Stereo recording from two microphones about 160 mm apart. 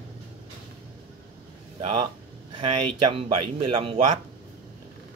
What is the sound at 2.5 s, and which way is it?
Speech, 35° right (ahead or behind).